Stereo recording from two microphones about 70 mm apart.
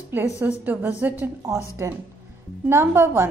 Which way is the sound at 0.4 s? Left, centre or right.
Right.